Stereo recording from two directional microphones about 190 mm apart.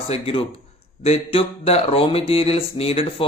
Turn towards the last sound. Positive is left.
turn(degrees=30)  # may be behind; listen again after turning